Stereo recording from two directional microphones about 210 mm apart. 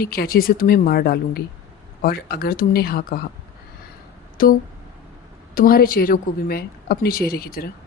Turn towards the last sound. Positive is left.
turn(degrees=45)  # may be behind; listen again after turning